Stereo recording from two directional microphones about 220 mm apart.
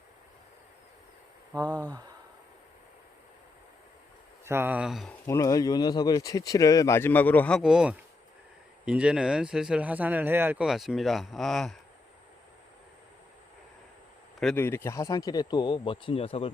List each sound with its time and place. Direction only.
1.8 s speech: 15° right (ahead or behind)
4.4 s speech: 10° right (ahead or behind)
5.2 s speech: 15° left (ahead or behind)
14.3 s speech: 5° left (ahead or behind); by 16.5 s 25° left (ahead or behind)